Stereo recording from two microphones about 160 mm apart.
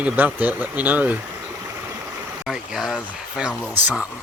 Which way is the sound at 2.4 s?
Centre (ahead or behind).